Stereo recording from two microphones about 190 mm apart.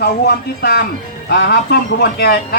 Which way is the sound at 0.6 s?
55° left (ahead or behind).